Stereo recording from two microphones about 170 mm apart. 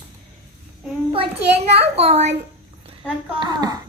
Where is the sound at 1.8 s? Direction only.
35° right (ahead or behind).